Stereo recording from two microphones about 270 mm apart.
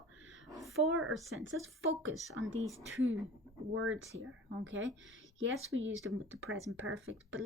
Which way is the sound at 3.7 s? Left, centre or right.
Right.